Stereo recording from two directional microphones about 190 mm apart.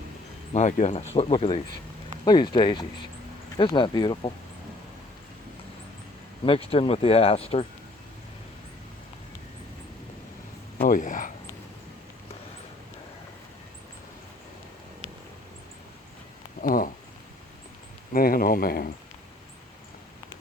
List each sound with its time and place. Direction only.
0.5 s speech: 40° left (ahead or behind); by 4.3 s 25° left (ahead or behind)
6.7 s speech: 30° left (ahead or behind)
10.8 s speech: 45° left (ahead or behind)
16.6 s speech: 45° left (ahead or behind)
18.1 s speech: 50° left (ahead or behind)